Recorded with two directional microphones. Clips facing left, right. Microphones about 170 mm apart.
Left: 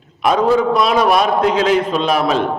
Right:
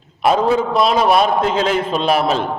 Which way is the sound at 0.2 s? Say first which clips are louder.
Left 1 dB; 25° right (ahead or behind).